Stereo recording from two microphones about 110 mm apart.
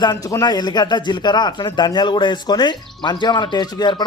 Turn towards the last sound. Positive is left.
turn(degrees=40)  # may be behind; listen again after turning